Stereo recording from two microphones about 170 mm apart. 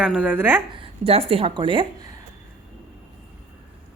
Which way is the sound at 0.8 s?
35° right (ahead or behind).